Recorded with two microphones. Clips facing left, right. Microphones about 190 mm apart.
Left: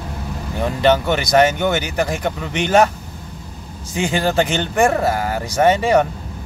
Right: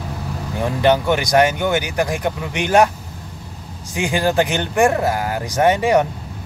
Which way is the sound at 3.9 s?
15° right (ahead or behind).